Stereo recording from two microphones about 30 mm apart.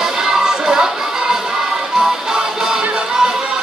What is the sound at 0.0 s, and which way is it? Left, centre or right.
Music, centre.